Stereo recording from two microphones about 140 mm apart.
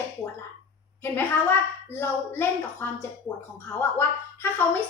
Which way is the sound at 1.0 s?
15° left (ahead or behind).